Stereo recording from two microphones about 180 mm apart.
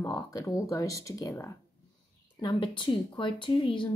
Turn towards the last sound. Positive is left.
turn(degrees=25)  # may be behind; listen again after turning